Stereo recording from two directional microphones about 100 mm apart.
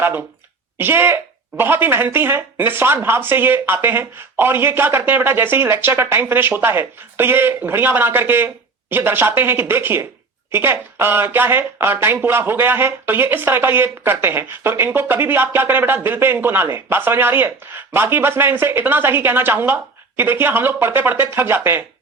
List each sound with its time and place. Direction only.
0.0 s speech: 20° right (ahead or behind)